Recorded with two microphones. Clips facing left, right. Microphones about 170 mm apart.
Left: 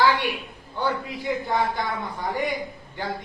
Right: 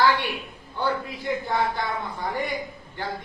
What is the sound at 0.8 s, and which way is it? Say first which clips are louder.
Speech: even; 15° left (ahead or behind).